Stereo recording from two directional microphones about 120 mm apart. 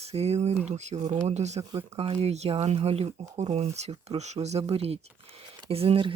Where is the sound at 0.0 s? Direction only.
60° right (ahead or behind).